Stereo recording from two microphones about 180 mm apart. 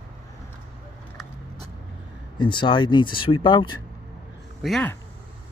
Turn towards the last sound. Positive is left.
turn(degrees=0)  # may be behind; listen again after turning